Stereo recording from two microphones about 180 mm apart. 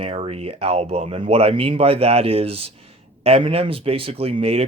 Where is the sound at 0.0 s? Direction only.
30° right (ahead or behind).